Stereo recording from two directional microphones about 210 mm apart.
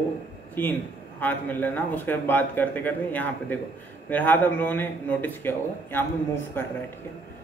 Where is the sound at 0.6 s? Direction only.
10° left (ahead or behind).